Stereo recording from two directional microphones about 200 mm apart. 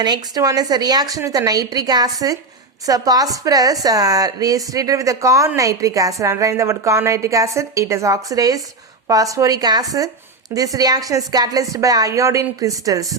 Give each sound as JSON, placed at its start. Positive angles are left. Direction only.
{"t": 0.0, "sound": "a woman's voice", "side_deg": -20}